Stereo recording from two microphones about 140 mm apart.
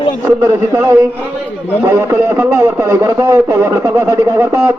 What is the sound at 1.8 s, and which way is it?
A man's voice, 20° right (ahead or behind).